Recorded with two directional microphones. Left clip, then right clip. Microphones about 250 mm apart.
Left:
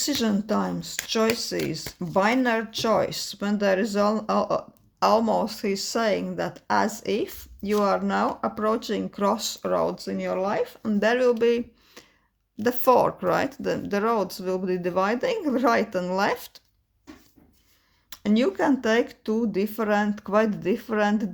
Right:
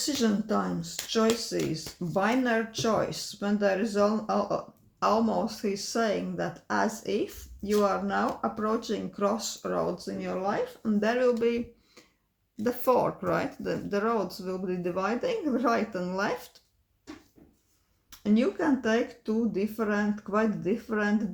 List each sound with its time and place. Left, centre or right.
0.0 s speech: left
18.1 s speech: left